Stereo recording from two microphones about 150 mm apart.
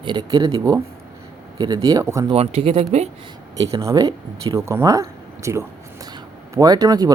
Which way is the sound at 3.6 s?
20° right (ahead or behind).